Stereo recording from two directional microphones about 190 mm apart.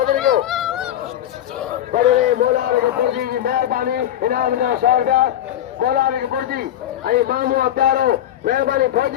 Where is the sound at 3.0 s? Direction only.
50° right (ahead or behind).